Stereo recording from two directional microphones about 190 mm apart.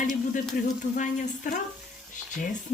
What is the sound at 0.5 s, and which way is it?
Speech, 50° left (ahead or behind).